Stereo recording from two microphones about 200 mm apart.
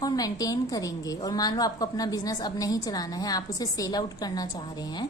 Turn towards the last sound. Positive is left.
turn(degrees=20)  # may be behind; listen again after turning